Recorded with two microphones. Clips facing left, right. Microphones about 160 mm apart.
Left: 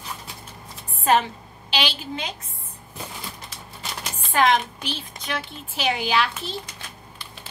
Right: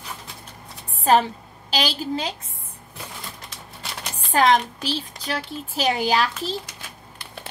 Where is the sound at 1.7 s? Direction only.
40° right (ahead or behind).